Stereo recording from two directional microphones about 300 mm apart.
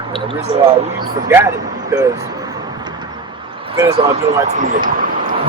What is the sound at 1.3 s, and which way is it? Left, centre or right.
Speech, centre.